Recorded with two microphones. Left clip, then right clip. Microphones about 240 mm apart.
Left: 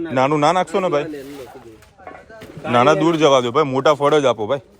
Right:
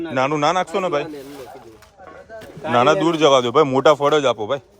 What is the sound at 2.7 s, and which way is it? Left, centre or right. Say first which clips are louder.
A man's voice: left 1 dB; centre.